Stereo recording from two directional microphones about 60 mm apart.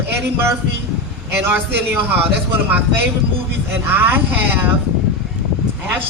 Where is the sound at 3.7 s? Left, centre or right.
Right.